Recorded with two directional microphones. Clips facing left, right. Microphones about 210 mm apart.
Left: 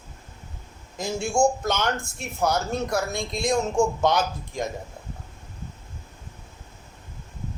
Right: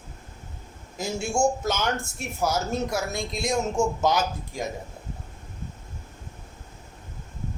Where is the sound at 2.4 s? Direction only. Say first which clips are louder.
Left 1 dB; 5° right (ahead or behind).